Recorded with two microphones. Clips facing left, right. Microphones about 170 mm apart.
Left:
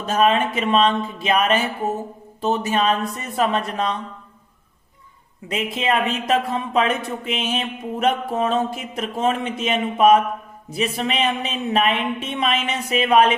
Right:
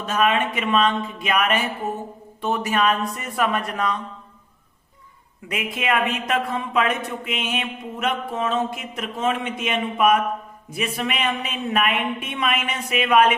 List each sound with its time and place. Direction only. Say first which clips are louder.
0.0 s a sound: left 3 dB; 35° left (ahead or behind)
2.4 s speech: left 1 dB; 25° left (ahead or behind)
5.5 s speech: left 2 dB; 30° left (ahead or behind)